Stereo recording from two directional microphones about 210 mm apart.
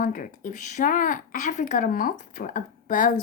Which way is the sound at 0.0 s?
40° left (ahead or behind).